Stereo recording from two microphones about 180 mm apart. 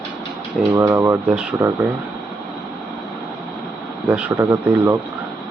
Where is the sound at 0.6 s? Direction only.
20° right (ahead or behind).